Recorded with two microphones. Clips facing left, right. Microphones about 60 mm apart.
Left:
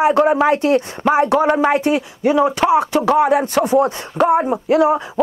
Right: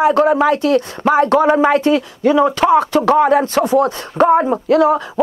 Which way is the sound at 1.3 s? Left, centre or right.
Right.